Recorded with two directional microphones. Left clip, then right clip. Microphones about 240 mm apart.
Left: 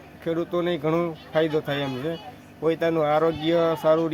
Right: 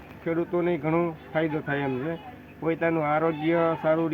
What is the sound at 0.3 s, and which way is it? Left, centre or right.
Speech, left.